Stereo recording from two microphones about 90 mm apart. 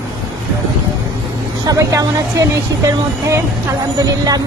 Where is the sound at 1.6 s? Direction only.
40° right (ahead or behind).